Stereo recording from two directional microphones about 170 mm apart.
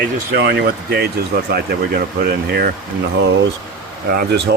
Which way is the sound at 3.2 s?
75° right (ahead or behind).